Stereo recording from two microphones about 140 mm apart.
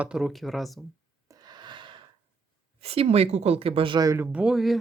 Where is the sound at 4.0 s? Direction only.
25° right (ahead or behind).